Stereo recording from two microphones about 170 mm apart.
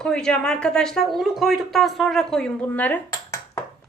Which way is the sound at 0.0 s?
5° left (ahead or behind).